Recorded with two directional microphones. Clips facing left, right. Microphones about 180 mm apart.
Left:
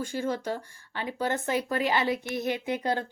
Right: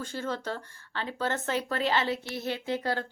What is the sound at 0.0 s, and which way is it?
Speech, 10° left (ahead or behind).